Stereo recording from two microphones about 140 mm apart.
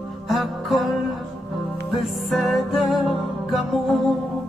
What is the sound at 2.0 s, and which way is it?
Music, centre (ahead or behind).